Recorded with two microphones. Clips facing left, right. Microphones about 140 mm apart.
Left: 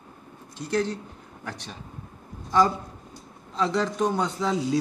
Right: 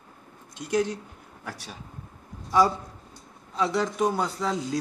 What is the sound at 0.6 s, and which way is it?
A man's voice, 15° right (ahead or behind).